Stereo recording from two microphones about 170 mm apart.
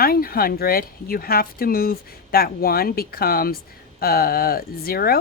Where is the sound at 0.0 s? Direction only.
60° left (ahead or behind).